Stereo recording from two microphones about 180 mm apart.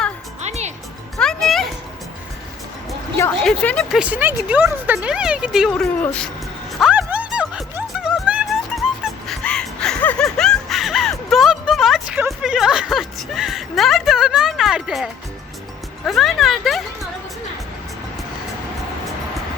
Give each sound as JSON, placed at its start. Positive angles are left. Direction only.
{"t": 0.4, "sound": "music", "side_deg": -40}
{"t": 1.1, "sound": "music", "side_deg": 0}
{"t": 3.4, "sound": "speech", "side_deg": 5}
{"t": 4.0, "sound": "speech", "side_deg": -10}
{"t": 6.7, "sound": "music", "side_deg": -5}